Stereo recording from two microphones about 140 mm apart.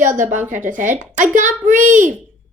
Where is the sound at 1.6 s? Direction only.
65° right (ahead or behind).